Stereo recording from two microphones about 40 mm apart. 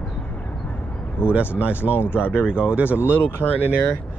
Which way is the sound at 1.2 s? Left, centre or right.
Left.